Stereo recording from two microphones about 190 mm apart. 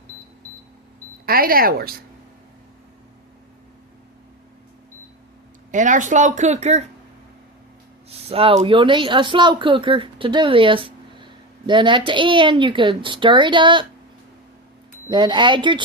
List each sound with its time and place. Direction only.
1.2 s speech: 50° right (ahead or behind)
5.7 s speech: 40° right (ahead or behind)
8.3 s speech: 30° right (ahead or behind)
15.1 s speech: 25° right (ahead or behind)